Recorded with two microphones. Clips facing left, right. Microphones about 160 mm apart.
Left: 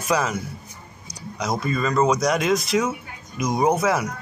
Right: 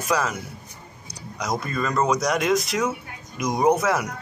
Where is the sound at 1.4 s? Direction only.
Centre (ahead or behind).